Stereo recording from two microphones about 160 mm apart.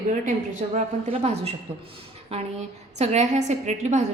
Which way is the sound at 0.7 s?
40° right (ahead or behind).